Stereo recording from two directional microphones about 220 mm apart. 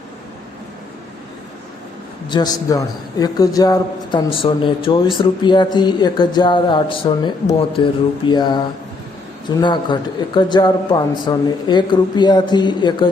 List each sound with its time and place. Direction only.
2.3 s speech: 15° left (ahead or behind)